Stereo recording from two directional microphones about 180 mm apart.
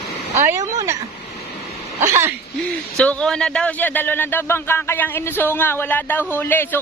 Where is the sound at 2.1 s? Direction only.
15° right (ahead or behind).